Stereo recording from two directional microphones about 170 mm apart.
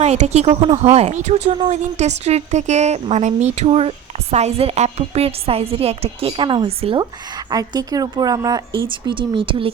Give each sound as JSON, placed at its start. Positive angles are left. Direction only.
{"t": 0.0, "sound": "a woman's voice", "side_deg": -40}